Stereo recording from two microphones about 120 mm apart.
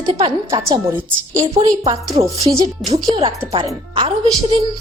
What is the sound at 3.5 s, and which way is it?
Speech, 45° right (ahead or behind).